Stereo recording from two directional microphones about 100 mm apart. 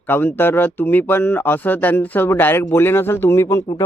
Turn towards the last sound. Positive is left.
turn(degrees=35)  # may be behind; listen again after turning